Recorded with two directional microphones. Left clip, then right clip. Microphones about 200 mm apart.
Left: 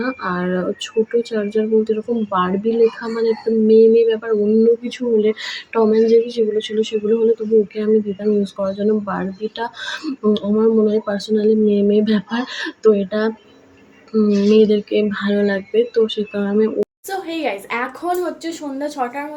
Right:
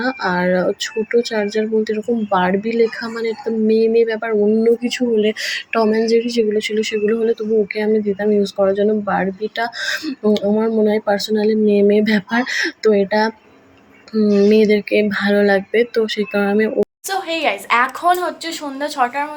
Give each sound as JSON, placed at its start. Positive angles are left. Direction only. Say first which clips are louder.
{"t": 0.0, "sound": "speech", "louder": "right 4 dB", "side_deg": -10}
{"t": 17.1, "sound": "a woman's voice", "louder": "right 4 dB", "side_deg": 5}